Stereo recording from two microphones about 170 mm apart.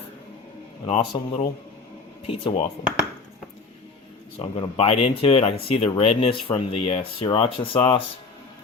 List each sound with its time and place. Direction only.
0.9 s speech: 40° left (ahead or behind)
4.4 s speech: 35° left (ahead or behind)